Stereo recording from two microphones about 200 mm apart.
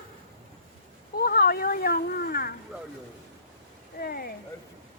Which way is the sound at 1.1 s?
50° left (ahead or behind).